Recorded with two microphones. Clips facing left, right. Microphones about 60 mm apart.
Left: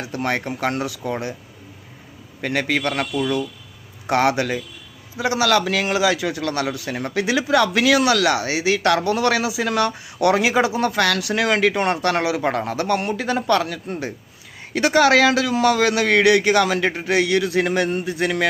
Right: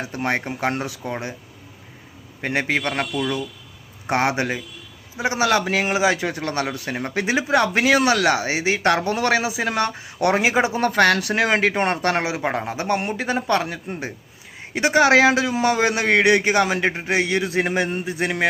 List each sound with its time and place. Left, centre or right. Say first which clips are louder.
0.0 s a man's voice: even; right
2.4 s a man's voice: left 1 dB; right
3.1 s a man's voice: left 2 dB; centre
10.8 s a man's voice: right 2 dB; right
12.4 s a man's voice: left 2 dB; centre